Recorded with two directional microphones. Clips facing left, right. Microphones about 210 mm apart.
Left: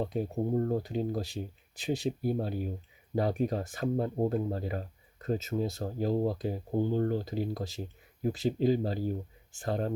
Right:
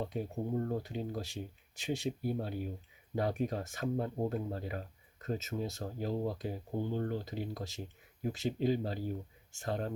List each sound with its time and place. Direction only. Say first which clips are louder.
0.0 s speech: left 5 dB; 35° left (ahead or behind)